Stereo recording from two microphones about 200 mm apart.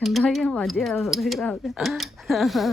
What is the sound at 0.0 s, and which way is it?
Speech, centre (ahead or behind).